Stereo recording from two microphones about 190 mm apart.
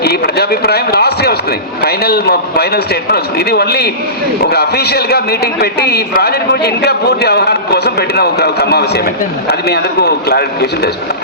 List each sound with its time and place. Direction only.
0.0 s a man's voice: 55° left (ahead or behind)